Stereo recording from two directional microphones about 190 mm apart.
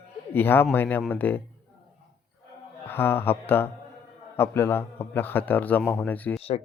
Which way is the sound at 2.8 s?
10° left (ahead or behind).